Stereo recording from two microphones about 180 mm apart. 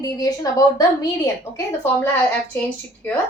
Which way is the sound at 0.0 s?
20° left (ahead or behind).